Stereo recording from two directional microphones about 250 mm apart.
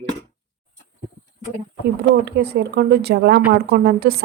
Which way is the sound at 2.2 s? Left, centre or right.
Right.